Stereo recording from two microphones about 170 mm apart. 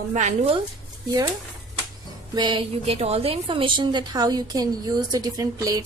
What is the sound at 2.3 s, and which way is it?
A woman's voice, 25° right (ahead or behind).